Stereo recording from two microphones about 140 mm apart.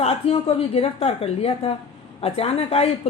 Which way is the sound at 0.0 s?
50° left (ahead or behind).